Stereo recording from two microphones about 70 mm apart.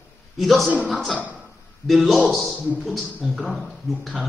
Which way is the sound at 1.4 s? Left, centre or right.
Centre.